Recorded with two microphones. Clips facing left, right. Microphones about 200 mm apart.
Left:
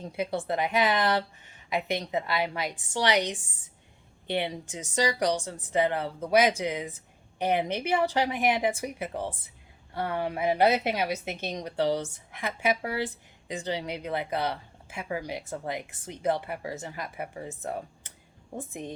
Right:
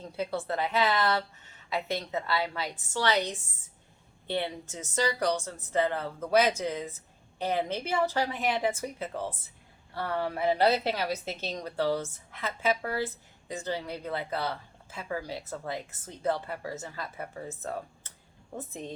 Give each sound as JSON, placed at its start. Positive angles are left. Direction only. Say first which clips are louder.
{"t": 0.0, "sound": "a woman's voice", "louder": "left 2 dB", "side_deg": 15}